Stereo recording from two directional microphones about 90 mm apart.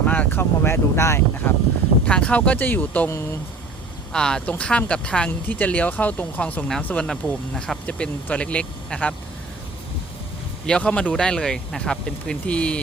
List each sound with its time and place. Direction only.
0.0 s speech: 15° left (ahead or behind)
3.1 s speech: 30° left (ahead or behind)
4.1 s speech: 10° left (ahead or behind)
10.7 s speech: 10° left (ahead or behind)